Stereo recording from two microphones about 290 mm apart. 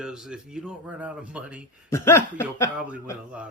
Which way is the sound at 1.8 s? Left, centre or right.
Centre.